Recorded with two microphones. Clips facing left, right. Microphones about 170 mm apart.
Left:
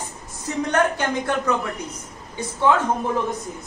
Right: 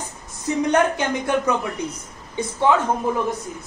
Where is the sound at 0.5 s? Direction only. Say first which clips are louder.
Right 2 dB; 20° right (ahead or behind).